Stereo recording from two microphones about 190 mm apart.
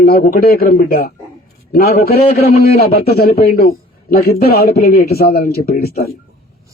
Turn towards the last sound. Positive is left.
turn(degrees=55)  # may be behind; listen again after turning